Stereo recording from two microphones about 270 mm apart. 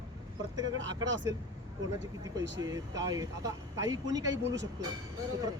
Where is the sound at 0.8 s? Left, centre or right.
Right.